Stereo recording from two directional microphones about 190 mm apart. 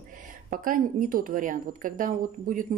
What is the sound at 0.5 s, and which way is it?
A woman's voice, 45° right (ahead or behind).